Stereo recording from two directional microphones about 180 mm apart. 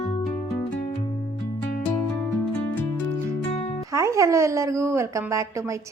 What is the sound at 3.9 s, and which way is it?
Speech, 15° right (ahead or behind).